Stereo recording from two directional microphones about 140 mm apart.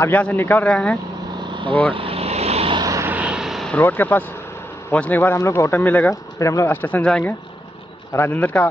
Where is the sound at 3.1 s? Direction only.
10° right (ahead or behind); by 6.1 s 15° left (ahead or behind).